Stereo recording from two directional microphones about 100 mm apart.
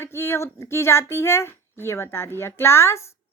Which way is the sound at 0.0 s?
25° left (ahead or behind).